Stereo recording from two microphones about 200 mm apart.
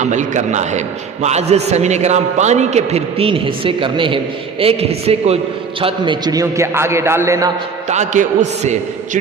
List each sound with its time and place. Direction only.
0.0 s a man's voice: 35° right (ahead or behind); by 7.5 s 15° right (ahead or behind)
7.9 s a man's voice: 35° right (ahead or behind)